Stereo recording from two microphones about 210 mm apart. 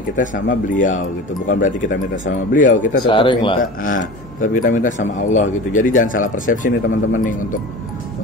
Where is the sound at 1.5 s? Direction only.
40° left (ahead or behind).